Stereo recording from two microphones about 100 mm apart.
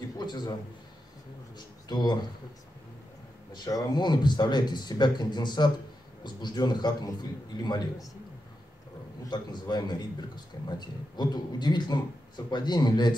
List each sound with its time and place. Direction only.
0.2 s a man's voice: 45° left (ahead or behind)
1.9 s a man's voice: 45° left (ahead or behind)
3.5 s a man's voice: 40° left (ahead or behind)
9.2 s a man's voice: 45° left (ahead or behind)